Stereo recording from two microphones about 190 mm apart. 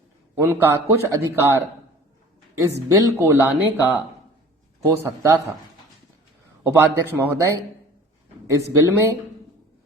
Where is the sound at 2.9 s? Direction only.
15° right (ahead or behind).